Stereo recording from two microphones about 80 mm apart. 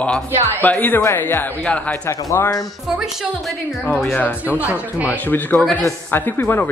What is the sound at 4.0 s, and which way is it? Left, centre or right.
Speech, left.